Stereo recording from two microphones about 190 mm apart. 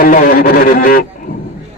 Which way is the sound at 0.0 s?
50° left (ahead or behind).